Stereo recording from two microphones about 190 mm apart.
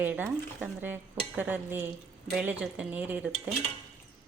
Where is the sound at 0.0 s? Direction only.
10° right (ahead or behind).